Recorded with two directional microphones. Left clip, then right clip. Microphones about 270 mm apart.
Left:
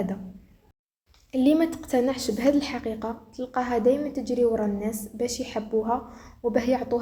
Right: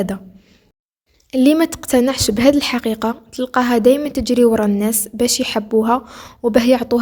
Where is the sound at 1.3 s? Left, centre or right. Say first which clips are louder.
Right 8 dB; right.